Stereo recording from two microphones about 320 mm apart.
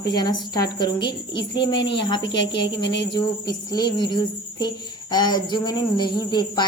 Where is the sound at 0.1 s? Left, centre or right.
Centre.